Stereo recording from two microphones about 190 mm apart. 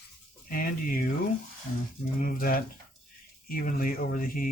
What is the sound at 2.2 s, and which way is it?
Speech, 50° left (ahead or behind).